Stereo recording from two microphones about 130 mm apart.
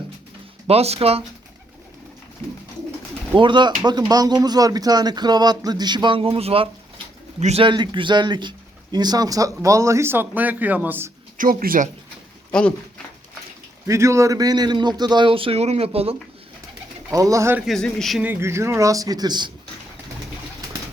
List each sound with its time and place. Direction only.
0.7 s speech: 50° right (ahead or behind)
3.3 s speech: 35° right (ahead or behind)
7.3 s speech: 60° right (ahead or behind)
7.6 s a man's voice: 40° right (ahead or behind); by 11.1 s 15° right (ahead or behind)
11.3 s speech: 90° right
12.5 s speech: 10° left (ahead or behind)
13.8 s speech: 20° right (ahead or behind); by 16.1 s 50° right (ahead or behind)
17.1 s speech: 25° right (ahead or behind)
17.7 s speech: 5° left (ahead or behind)
18.2 s speech: 15° right (ahead or behind); by 19.5 s 30° right (ahead or behind)